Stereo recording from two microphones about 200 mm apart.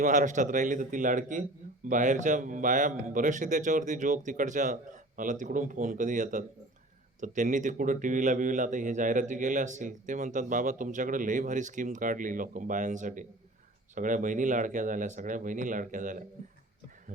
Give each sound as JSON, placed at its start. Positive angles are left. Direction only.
{"t": 0.0, "sound": "a man's voice", "side_deg": -40}